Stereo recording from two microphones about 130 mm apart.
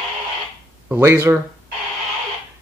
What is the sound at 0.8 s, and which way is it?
Speech, 15° right (ahead or behind).